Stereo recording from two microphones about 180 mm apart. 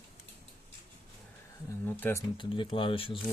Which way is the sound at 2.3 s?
30° left (ahead or behind).